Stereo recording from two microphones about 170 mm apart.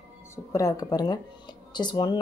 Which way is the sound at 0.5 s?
20° left (ahead or behind).